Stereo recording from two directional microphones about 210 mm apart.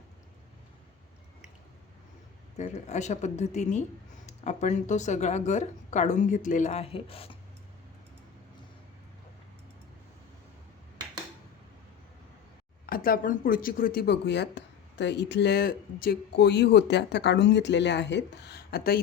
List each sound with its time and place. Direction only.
2.6 s speech: 35° left (ahead or behind)
12.8 s speech: 45° left (ahead or behind)